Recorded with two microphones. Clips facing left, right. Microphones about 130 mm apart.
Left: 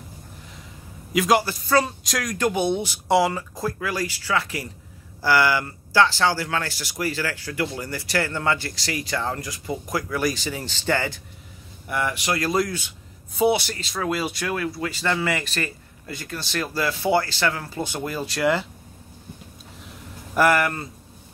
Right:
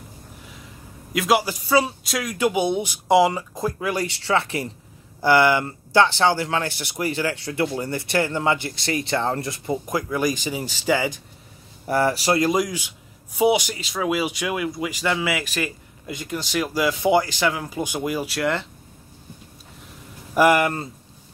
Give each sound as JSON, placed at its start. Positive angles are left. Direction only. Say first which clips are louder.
{"t": 1.1, "sound": "a man's voice", "louder": "left 1 dB", "side_deg": 0}
{"t": 1.4, "sound": "speech", "louder": "right 1 dB", "side_deg": -15}
{"t": 11.9, "sound": "speech", "louder": "right 5 dB", "side_deg": -35}
{"t": 12.4, "sound": "speech", "louder": "right 3 dB", "side_deg": -15}
{"t": 20.3, "sound": "speech", "louder": "right 2 dB", "side_deg": -15}